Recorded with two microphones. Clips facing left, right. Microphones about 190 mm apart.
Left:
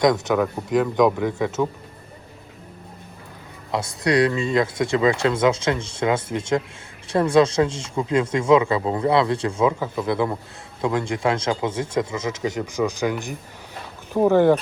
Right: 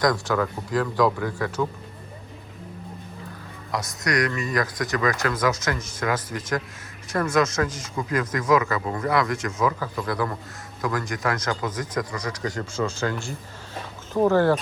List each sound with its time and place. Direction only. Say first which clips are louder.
0.0 s speech: left 4 dB; 20° left (ahead or behind)
3.7 s speech: left 5 dB; 30° left (ahead or behind)